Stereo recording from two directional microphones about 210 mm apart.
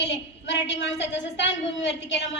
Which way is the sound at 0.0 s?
55° left (ahead or behind).